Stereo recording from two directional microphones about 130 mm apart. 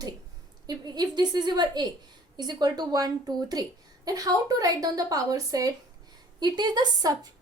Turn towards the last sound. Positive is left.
turn(degrees=-35)  # may be behind; listen again after turning